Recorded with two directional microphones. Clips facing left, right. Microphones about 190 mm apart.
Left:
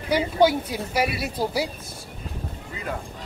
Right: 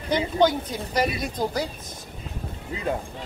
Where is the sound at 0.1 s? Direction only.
10° left (ahead or behind).